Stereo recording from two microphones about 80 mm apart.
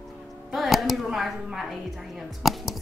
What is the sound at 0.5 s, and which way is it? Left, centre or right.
Speech, centre.